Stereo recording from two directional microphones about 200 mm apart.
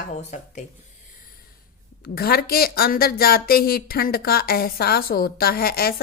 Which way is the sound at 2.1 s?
50° left (ahead or behind).